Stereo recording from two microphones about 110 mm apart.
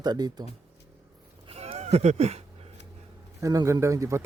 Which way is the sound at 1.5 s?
70° right (ahead or behind).